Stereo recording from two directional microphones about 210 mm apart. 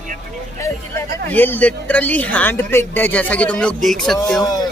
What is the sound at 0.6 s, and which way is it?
Speech, 10° left (ahead or behind).